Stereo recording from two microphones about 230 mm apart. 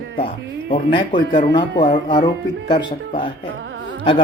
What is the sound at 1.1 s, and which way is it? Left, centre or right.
Speech, centre.